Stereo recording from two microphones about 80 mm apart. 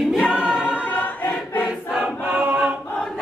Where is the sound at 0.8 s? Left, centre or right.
Left.